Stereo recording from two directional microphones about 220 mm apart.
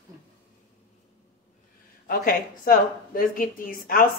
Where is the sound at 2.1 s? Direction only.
40° left (ahead or behind).